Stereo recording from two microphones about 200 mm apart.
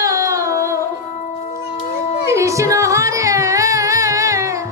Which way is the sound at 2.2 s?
15° right (ahead or behind).